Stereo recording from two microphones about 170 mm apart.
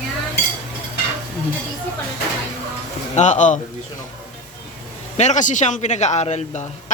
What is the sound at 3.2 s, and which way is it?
Speech, 45° left (ahead or behind).